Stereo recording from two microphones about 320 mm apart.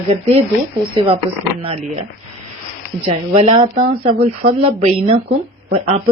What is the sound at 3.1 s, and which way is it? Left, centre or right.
Speech, centre.